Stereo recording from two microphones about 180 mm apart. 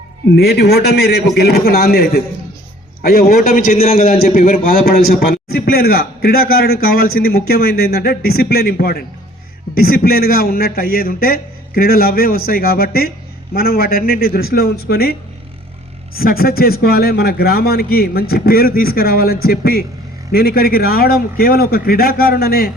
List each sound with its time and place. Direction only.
0.3 s a man's voice: 65° left (ahead or behind)
3.7 s a man's voice: 35° left (ahead or behind)
4.0 s a man's voice: 50° left (ahead or behind)
16.1 s a man's voice: 55° left (ahead or behind)